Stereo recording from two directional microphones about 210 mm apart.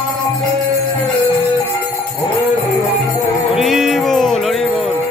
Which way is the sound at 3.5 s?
Centre (ahead or behind).